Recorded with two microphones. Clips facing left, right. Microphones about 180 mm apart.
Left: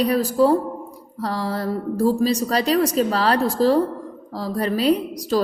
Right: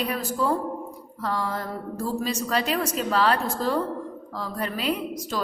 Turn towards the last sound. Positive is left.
turn(degrees=35)  # may be behind; listen again after turning